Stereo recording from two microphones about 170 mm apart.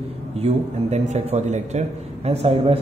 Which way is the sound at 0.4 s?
40° right (ahead or behind).